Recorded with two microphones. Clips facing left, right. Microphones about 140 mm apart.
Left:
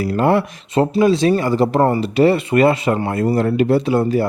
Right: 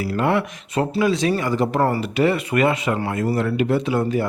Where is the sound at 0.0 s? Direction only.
35° left (ahead or behind).